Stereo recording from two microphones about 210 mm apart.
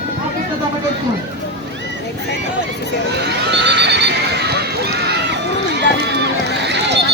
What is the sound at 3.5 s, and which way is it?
Horse, 55° right (ahead or behind).